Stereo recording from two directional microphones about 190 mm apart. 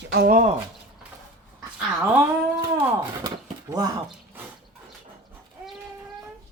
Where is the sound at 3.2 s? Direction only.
20° right (ahead or behind).